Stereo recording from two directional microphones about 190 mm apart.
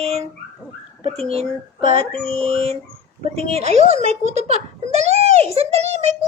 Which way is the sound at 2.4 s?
35° right (ahead or behind).